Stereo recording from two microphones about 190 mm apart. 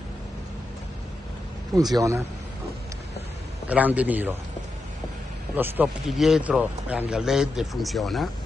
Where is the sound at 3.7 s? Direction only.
10° right (ahead or behind).